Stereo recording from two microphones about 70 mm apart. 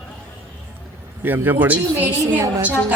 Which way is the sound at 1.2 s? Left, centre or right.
Right.